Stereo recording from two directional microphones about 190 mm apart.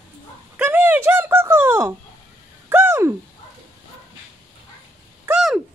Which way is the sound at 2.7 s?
10° right (ahead or behind).